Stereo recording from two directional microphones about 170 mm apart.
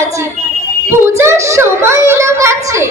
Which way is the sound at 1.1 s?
15° right (ahead or behind).